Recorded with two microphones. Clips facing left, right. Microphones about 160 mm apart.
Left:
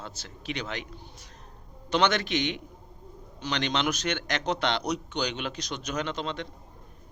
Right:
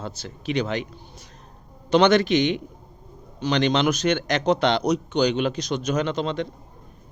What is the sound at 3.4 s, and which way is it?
A man's voice, 40° right (ahead or behind).